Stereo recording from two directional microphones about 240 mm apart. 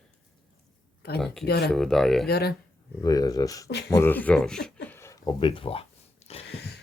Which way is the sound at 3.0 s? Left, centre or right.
Centre.